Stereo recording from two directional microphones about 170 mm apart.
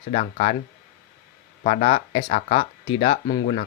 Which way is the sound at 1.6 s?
40° left (ahead or behind).